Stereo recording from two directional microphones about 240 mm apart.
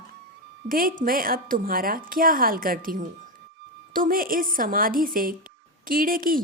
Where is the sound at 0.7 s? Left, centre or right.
Right.